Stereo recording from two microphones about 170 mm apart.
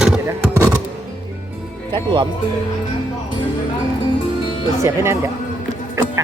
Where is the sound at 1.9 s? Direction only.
25° right (ahead or behind).